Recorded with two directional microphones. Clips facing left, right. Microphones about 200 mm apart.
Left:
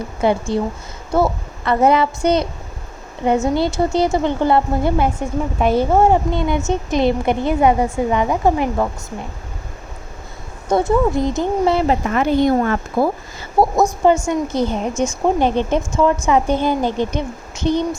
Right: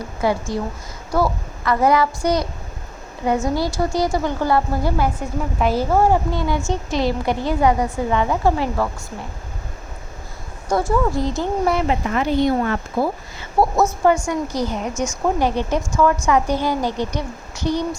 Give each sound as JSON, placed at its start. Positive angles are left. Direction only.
{"t": 0.2, "sound": "a woman's voice", "side_deg": 25}
{"t": 10.7, "sound": "a woman's voice", "side_deg": 20}
{"t": 12.1, "sound": "speech", "side_deg": 50}
{"t": 13.6, "sound": "a woman's voice", "side_deg": 15}